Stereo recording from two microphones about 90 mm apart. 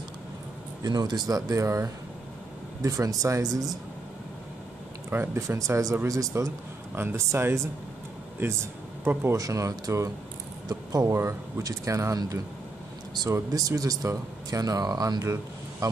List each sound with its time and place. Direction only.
0.8 s a man's voice: 50° right (ahead or behind)
5.1 s speech: 25° right (ahead or behind)
7.0 s speech: 25° right (ahead or behind)
13.3 s a man's voice: 40° right (ahead or behind)